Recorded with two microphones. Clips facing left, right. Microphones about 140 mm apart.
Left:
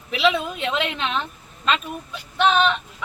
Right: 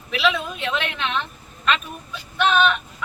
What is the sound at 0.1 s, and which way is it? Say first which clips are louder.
Speech: left 2 dB; 25° left (ahead or behind).